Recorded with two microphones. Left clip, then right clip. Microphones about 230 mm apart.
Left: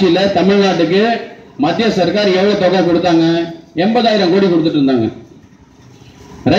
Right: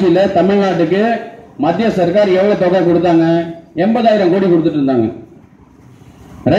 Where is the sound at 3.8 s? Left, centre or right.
Left.